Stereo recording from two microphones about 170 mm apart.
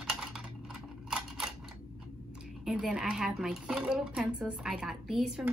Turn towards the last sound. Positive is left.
turn(degrees=-5)  # may be behind; listen again after turning